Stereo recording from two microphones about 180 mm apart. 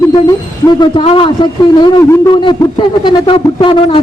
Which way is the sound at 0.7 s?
25° left (ahead or behind).